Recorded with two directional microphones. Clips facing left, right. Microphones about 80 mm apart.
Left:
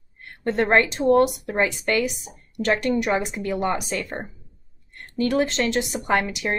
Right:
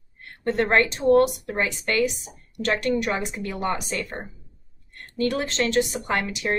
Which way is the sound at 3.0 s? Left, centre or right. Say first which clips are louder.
Left 3 dB; centre.